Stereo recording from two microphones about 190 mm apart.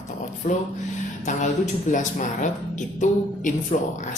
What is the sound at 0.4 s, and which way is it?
Speech, 40° left (ahead or behind).